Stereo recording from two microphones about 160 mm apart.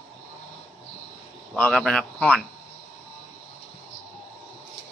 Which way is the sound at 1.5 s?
5° left (ahead or behind).